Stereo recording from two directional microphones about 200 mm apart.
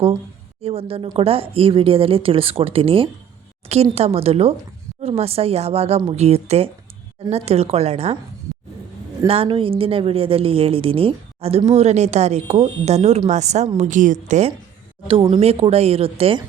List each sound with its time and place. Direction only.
0.6 s a woman's voice: 30° right (ahead or behind)
9.2 s a woman's voice: 30° right (ahead or behind)